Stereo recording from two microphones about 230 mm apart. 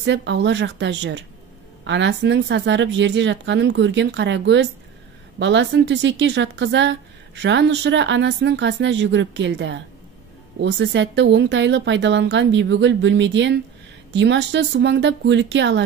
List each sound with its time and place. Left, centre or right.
0.0 s a woman's voice: right